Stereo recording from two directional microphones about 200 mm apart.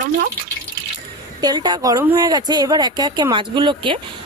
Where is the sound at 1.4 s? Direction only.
20° right (ahead or behind).